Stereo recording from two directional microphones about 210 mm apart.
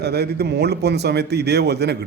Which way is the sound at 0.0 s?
50° right (ahead or behind).